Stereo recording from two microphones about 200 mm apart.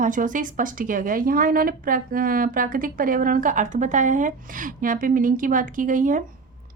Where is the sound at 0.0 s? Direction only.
40° right (ahead or behind).